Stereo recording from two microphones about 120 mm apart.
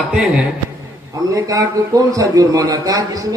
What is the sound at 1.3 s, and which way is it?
A man's voice, 30° right (ahead or behind).